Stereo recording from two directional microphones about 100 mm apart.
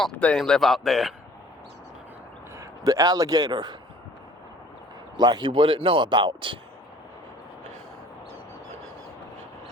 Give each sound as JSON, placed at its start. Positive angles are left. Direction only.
{"t": 0.0, "sound": "a man's voice", "side_deg": 10}
{"t": 2.6, "sound": "a man's voice", "side_deg": -35}
{"t": 5.1, "sound": "speech", "side_deg": -45}